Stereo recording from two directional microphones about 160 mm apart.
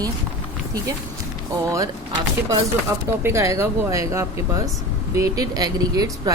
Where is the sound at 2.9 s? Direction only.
15° right (ahead or behind).